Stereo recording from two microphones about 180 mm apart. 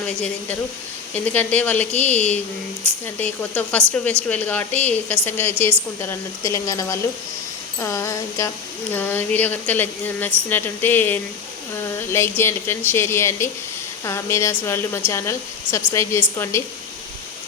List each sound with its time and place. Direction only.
1.1 s a woman's voice: 10° left (ahead or behind)